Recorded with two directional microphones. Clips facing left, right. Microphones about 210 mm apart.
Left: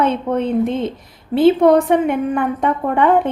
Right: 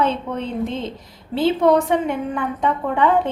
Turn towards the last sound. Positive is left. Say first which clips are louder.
# left 3 dB
turn(degrees=55)  # may be behind; listen again after turning